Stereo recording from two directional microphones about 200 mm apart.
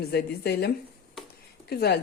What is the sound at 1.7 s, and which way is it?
Speech, 55° left (ahead or behind).